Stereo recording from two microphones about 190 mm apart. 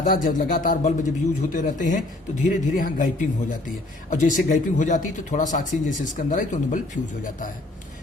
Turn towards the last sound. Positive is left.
turn(degrees=40)  # may be behind; listen again after turning